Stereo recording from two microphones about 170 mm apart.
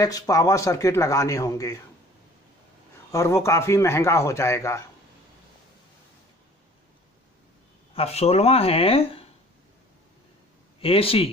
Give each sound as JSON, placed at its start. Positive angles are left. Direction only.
{"t": 0.0, "sound": "speech", "side_deg": 20}
{"t": 3.1, "sound": "a man's voice", "side_deg": 15}
{"t": 7.9, "sound": "speech", "side_deg": 35}
{"t": 10.8, "sound": "speech", "side_deg": 35}